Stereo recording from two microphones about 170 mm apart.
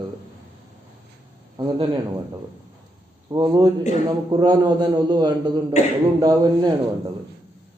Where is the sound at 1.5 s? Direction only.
25° right (ahead or behind).